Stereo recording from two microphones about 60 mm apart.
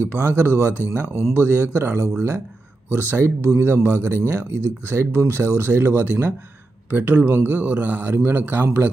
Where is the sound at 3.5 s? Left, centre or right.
Right.